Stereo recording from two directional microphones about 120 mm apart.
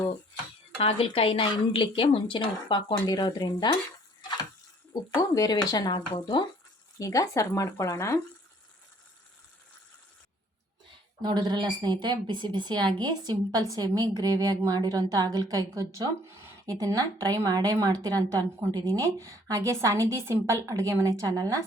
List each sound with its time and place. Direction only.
0.8 s speech: 55° left (ahead or behind); by 3.8 s 35° left (ahead or behind)
5.1 s speech: 30° left (ahead or behind)
11.2 s a woman's voice: 40° right (ahead or behind)